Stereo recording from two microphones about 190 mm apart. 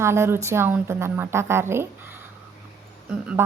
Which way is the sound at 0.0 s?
15° right (ahead or behind).